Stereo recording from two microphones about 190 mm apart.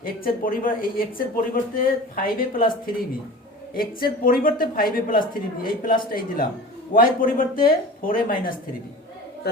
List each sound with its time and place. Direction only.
0.0 s a woman's voice: 50° left (ahead or behind)
3.8 s a woman's voice: 50° left (ahead or behind)